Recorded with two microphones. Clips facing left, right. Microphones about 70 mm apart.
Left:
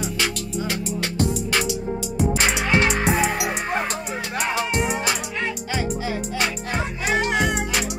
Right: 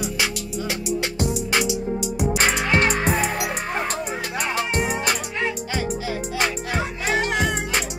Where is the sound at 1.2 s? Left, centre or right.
Centre.